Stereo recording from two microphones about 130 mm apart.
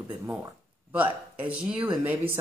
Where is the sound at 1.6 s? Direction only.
40° right (ahead or behind).